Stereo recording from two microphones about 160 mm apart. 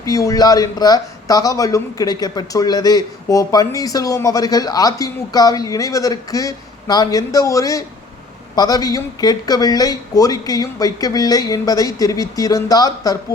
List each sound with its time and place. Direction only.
0.0 s speech: 20° left (ahead or behind)